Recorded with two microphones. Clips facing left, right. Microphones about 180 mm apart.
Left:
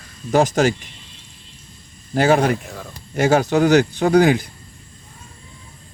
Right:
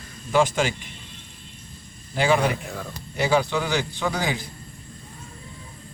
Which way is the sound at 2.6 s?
Centre (ahead or behind).